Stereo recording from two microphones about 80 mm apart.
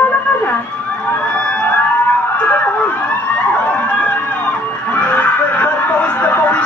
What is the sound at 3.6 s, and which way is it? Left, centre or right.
Music, centre.